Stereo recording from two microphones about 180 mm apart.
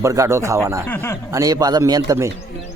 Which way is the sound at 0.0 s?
15° right (ahead or behind).